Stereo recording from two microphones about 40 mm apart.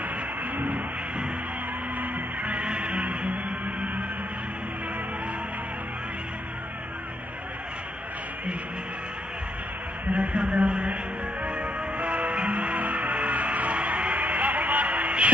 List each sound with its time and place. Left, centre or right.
0.0 s a sound: right
2.0 s music: right
10.1 s speech: right
11.4 s music: right